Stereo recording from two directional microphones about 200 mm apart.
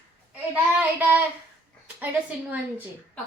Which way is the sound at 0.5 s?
10° right (ahead or behind).